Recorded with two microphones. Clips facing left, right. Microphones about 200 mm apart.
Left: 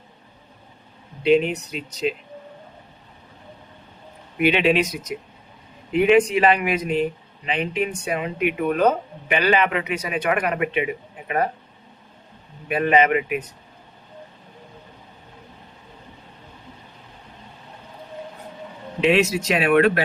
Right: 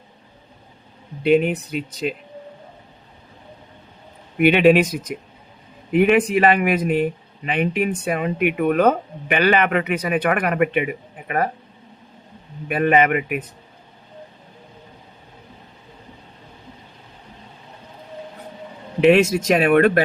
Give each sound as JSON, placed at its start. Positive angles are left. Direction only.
{"t": 1.2, "sound": "speech", "side_deg": -55}
{"t": 4.4, "sound": "speech", "side_deg": -55}
{"t": 5.9, "sound": "speech", "side_deg": -55}
{"t": 12.6, "sound": "speech", "side_deg": -55}
{"t": 19.0, "sound": "speech", "side_deg": -50}